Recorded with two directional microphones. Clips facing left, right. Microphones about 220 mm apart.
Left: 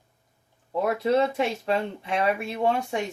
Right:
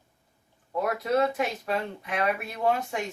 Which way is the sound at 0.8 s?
25° left (ahead or behind).